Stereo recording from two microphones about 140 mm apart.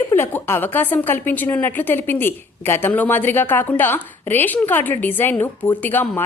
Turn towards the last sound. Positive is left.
turn(degrees=15)  # may be behind; listen again after turning